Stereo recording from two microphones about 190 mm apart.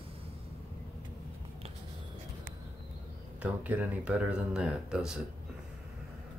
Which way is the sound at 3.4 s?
10° right (ahead or behind).